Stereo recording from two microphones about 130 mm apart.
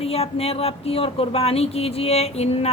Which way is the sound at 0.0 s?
50° left (ahead or behind).